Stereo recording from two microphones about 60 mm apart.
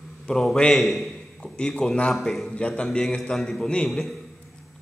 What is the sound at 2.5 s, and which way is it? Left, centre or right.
A man's voice, centre.